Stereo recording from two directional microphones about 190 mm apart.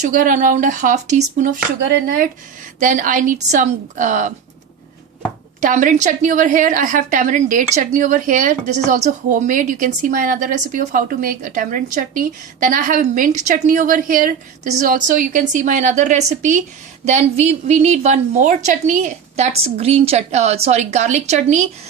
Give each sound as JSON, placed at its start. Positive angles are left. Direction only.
{"t": 0.0, "sound": "a woman's voice", "side_deg": -45}
{"t": 5.5, "sound": "a woman's voice", "side_deg": -40}